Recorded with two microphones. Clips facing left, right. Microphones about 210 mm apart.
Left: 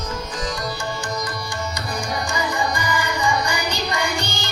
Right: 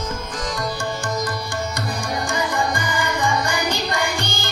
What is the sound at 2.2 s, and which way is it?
Carnatic music, 55° right (ahead or behind).